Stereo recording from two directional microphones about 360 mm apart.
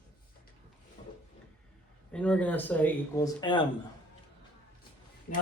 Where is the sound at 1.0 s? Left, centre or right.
Centre.